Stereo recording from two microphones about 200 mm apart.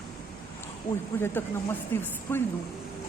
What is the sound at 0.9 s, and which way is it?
Speech, 40° left (ahead or behind).